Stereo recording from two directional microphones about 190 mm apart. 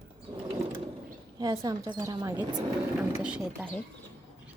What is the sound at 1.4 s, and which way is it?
Speech, 20° right (ahead or behind).